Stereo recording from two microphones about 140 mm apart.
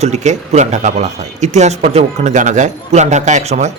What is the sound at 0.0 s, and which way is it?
A man's voice, 55° right (ahead or behind).